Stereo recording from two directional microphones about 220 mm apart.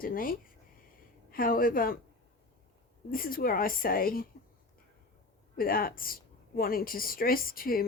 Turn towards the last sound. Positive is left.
turn(degrees=40)  # may be behind; listen again after turning